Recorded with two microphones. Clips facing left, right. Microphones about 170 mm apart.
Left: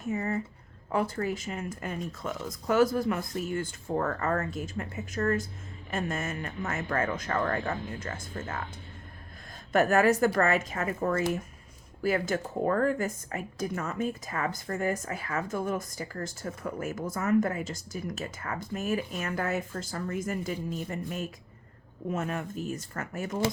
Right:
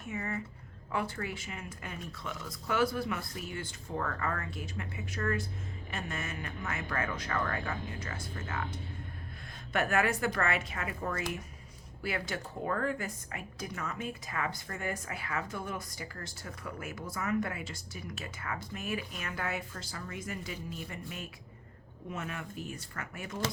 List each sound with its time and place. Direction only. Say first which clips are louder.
0.0 s a sound: left 7 dB; 35° left (ahead or behind)
0.9 s speech: left 6 dB; 40° left (ahead or behind)
9.7 s speech: left 7 dB; 40° left (ahead or behind)